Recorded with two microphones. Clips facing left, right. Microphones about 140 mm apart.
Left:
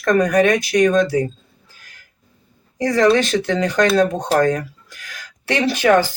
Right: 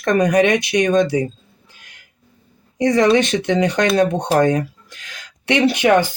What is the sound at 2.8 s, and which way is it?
Speech, 20° right (ahead or behind).